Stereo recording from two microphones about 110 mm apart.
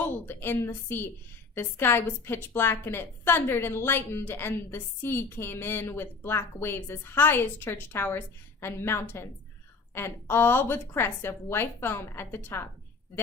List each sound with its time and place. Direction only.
0.3 s a woman's voice: 20° left (ahead or behind)